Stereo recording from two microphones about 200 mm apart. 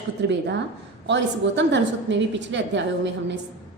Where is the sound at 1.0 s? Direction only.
65° right (ahead or behind).